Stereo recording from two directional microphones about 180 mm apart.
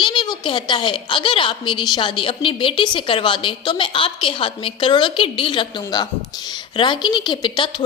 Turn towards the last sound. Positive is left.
turn(degrees=25)  # may be behind; listen again after turning